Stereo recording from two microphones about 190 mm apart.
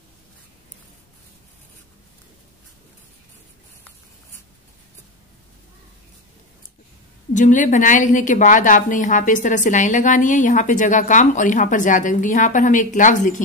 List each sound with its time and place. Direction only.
7.3 s a woman's voice: 40° left (ahead or behind)